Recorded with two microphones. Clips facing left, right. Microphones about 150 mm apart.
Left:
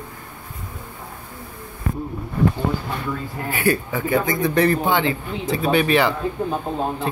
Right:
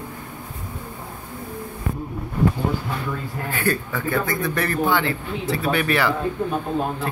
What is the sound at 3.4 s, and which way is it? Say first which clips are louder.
Speech: left 3 dB; 10° left (ahead or behind).